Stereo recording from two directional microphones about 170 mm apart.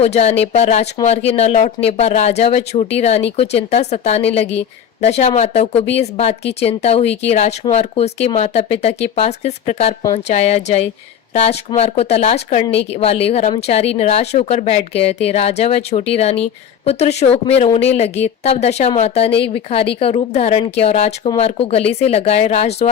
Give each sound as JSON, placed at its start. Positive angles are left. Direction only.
{"t": 0.0, "sound": "speech", "side_deg": 40}